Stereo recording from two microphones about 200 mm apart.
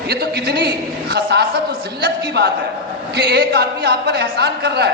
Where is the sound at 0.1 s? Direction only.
55° right (ahead or behind).